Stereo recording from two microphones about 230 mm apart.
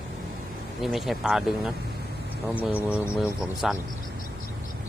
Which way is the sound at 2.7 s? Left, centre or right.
Centre.